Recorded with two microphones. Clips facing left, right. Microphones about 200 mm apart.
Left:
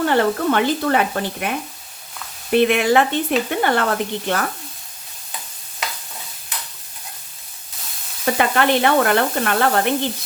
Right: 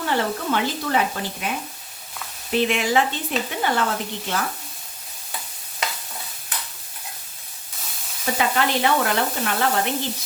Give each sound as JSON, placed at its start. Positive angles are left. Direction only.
{"t": 0.0, "sound": "speech", "side_deg": 55}
{"t": 8.2, "sound": "speech", "side_deg": 60}